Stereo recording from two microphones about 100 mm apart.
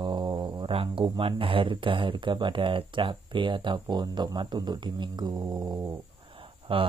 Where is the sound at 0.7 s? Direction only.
65° right (ahead or behind); by 5.8 s 40° right (ahead or behind).